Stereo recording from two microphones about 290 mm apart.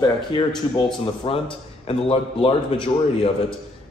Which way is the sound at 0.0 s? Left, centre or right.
Centre.